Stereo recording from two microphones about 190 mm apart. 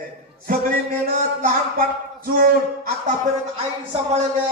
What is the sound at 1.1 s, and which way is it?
A man's voice, 45° right (ahead or behind).